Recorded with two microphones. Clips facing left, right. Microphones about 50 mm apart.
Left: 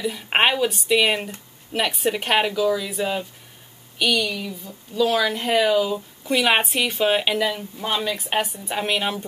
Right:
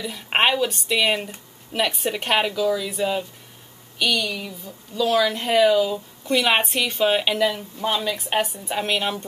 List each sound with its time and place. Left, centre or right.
0.0 s speech: centre